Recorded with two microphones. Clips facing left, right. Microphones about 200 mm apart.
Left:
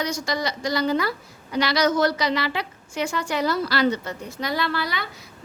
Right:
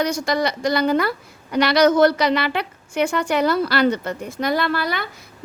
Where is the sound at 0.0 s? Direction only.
55° right (ahead or behind).